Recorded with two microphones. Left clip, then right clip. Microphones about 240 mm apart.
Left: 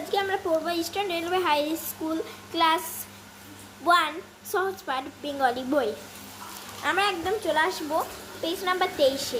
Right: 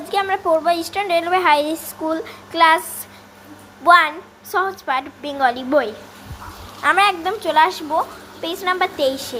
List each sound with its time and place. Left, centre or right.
0.1 s a woman's voice: centre
3.8 s a woman's voice: centre